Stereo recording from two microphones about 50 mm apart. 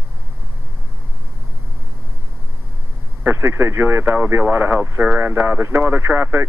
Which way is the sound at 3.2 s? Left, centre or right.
Right.